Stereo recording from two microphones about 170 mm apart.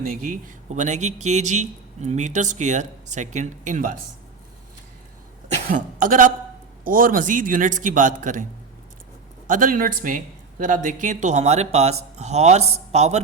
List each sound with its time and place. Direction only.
0.0 s speech: 55° right (ahead or behind)
5.6 s speech: 50° right (ahead or behind)
9.5 s speech: 55° right (ahead or behind)